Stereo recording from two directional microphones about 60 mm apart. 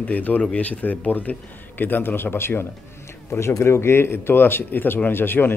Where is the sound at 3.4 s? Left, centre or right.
Left.